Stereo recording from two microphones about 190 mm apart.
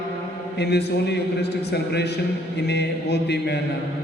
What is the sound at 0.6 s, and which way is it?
A man's voice, 60° left (ahead or behind).